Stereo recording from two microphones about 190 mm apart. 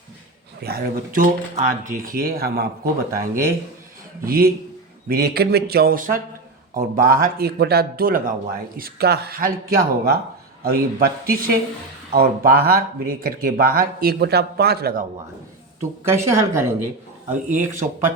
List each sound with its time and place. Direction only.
0.6 s speech: 50° right (ahead or behind)
4.2 s speech: 50° right (ahead or behind)
16.0 s speech: 15° right (ahead or behind)
17.5 s speech: 40° right (ahead or behind)